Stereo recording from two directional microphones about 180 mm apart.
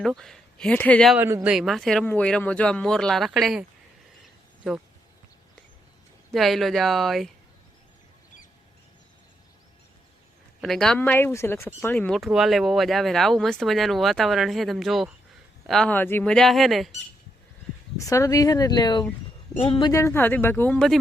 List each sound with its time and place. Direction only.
0.0 s speech: centre (ahead or behind)
1.1 s speech: 15° right (ahead or behind)
1.5 s speech: centre (ahead or behind)
6.3 s speech: centre (ahead or behind)
10.6 s speech: centre (ahead or behind)
17.9 s speech: 15° left (ahead or behind)
19.9 s speech: 15° left (ahead or behind)